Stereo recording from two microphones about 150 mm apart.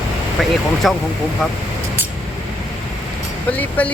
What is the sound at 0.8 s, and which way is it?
Speech, centre (ahead or behind).